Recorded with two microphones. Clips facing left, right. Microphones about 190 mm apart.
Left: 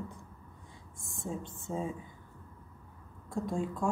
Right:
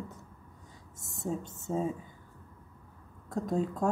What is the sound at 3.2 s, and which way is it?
Speech, 40° right (ahead or behind).